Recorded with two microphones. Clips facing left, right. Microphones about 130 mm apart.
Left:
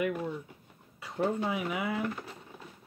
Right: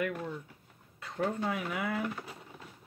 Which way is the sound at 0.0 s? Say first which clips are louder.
Left 3 dB; 10° left (ahead or behind).